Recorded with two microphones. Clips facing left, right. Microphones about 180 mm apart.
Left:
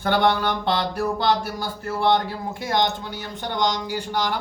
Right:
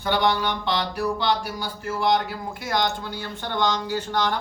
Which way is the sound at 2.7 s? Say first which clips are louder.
Left 2 dB; 20° left (ahead or behind).